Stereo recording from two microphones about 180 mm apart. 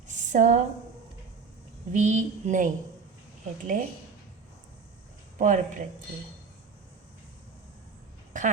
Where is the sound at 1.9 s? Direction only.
40° right (ahead or behind).